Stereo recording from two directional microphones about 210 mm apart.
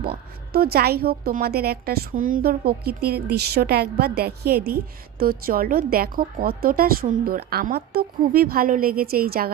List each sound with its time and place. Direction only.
0.0 s a woman's voice: 45° right (ahead or behind)